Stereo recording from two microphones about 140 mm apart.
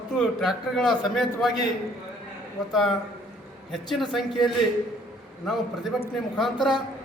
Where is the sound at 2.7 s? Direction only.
Centre (ahead or behind).